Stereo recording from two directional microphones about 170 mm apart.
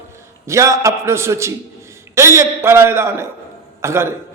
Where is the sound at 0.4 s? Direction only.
20° right (ahead or behind).